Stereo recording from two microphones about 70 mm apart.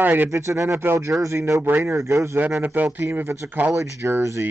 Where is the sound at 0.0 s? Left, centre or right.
Right.